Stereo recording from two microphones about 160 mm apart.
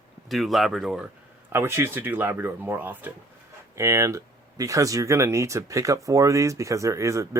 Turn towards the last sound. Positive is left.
turn(degrees=-20)  # may be behind; listen again after turning